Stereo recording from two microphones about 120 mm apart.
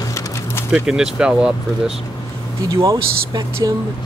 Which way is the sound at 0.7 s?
5° right (ahead or behind).